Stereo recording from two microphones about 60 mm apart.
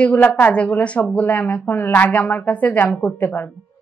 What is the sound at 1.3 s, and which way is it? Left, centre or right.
A woman's voice, left.